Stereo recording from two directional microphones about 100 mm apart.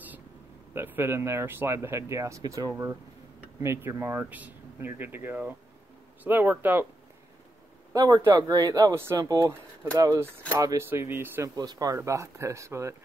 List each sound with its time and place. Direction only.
0.7 s speech: 20° right (ahead or behind)
2.7 s speech: 25° right (ahead or behind)
7.9 s speech: 35° right (ahead or behind)
8.9 s speech: 25° right (ahead or behind)
9.2 s speech: 40° right (ahead or behind)
10.9 s speech: 20° right (ahead or behind)
11.4 s speech: 40° right (ahead or behind)